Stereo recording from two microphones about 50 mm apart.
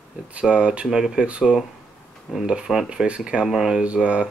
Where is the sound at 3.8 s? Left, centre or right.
Right.